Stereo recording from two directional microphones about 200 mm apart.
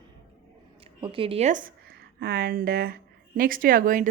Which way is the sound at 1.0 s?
25° right (ahead or behind).